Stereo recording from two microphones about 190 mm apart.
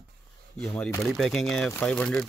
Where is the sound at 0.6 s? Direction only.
5° left (ahead or behind).